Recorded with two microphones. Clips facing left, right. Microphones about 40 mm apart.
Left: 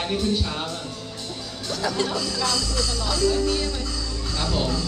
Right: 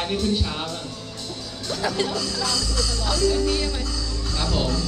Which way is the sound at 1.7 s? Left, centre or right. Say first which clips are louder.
Right 1 dB; centre.